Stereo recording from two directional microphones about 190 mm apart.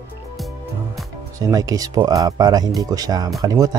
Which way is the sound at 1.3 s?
15° right (ahead or behind).